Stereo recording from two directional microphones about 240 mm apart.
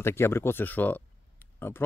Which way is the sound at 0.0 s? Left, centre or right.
Centre.